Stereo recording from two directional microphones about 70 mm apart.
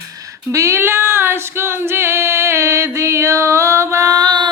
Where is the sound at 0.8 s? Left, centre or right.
Right.